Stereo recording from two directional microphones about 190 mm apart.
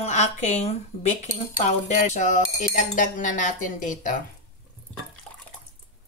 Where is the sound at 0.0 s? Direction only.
35° left (ahead or behind).